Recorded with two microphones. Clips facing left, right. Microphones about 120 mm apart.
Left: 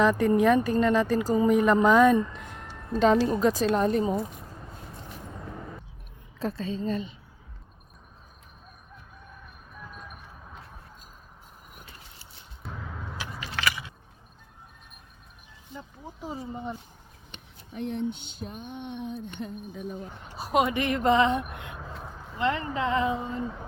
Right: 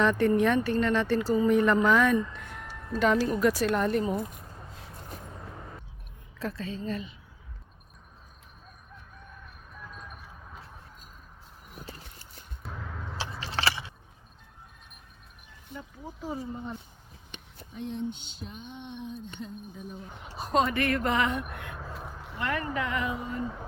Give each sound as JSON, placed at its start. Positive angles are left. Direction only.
{"t": 0.0, "sound": "speech", "side_deg": 10}
{"t": 6.6, "sound": "speech", "side_deg": 25}
{"t": 9.7, "sound": "music", "side_deg": 5}
{"t": 11.7, "sound": "a sound", "side_deg": -35}
{"t": 12.6, "sound": "a sound", "side_deg": 0}
{"t": 13.4, "sound": "keys jangling", "side_deg": -30}
{"t": 16.2, "sound": "speech", "side_deg": 20}
{"t": 17.7, "sound": "a sound", "side_deg": 60}
{"t": 20.3, "sound": "speech", "side_deg": 5}
{"t": 21.8, "sound": "vehicle", "side_deg": 0}
{"t": 22.4, "sound": "speech", "side_deg": 25}
{"t": 23.4, "sound": "speech", "side_deg": 0}